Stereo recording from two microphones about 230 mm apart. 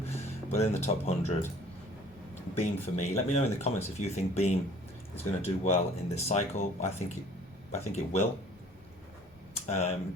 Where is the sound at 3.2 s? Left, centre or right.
Left.